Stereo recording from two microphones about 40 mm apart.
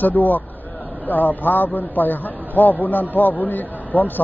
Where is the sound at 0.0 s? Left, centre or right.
Left.